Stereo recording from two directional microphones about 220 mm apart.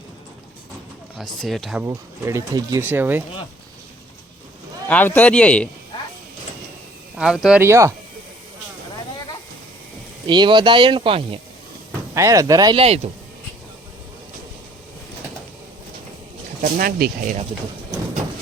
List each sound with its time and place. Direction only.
1.2 s speech: centre (ahead or behind)
1.8 s speech: 15° right (ahead or behind)
4.9 s speech: 10° left (ahead or behind)
7.2 s speech: centre (ahead or behind)
10.2 s speech: 20° right (ahead or behind)
16.7 s speech: 40° right (ahead or behind)